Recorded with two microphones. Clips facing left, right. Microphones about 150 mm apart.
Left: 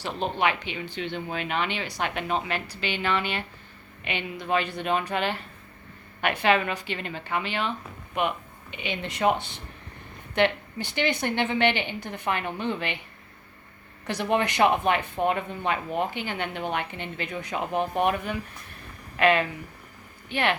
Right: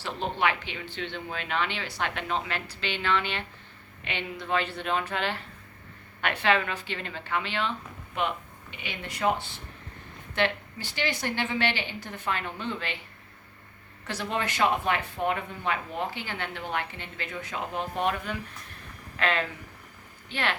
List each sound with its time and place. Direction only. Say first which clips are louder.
0.0 s speech: left 2 dB; 15° left (ahead or behind)
8.7 s a woman's voice: left 6 dB; 20° left (ahead or behind)
11.1 s a woman's voice: left 4 dB; 55° left (ahead or behind)
11.3 s speech: left 6 dB; 20° left (ahead or behind)
14.3 s speech: left 4 dB; 20° left (ahead or behind)